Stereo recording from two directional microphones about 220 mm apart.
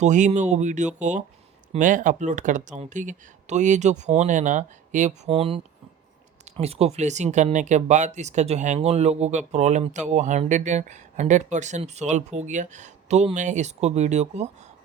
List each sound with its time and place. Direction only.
0.0 s speech: 35° right (ahead or behind)
6.6 s speech: 30° right (ahead or behind)